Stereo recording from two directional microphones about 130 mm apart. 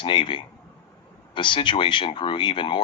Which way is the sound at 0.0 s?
40° left (ahead or behind).